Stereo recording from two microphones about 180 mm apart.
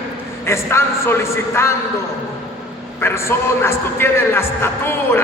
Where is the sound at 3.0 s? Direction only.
15° left (ahead or behind).